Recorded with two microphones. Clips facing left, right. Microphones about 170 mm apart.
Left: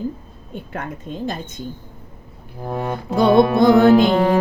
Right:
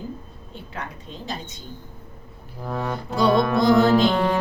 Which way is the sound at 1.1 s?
50° left (ahead or behind).